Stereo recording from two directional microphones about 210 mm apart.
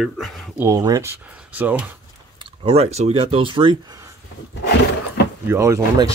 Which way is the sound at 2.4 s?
30° right (ahead or behind).